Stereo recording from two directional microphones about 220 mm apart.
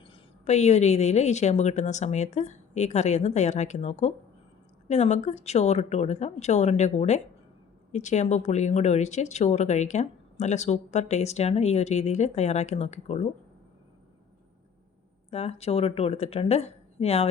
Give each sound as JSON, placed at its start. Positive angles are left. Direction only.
{"t": 0.0, "sound": "speech", "side_deg": 25}
{"t": 15.3, "sound": "speech", "side_deg": 30}